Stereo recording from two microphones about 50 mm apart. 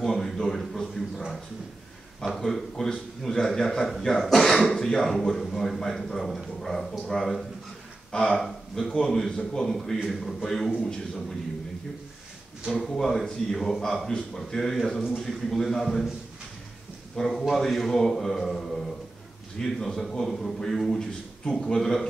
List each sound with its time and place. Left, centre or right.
0.0 s a sound: centre
2.3 s a man's voice: centre
9.7 s a man's voice: centre
12.9 s a man's voice: centre
17.2 s a man's voice: centre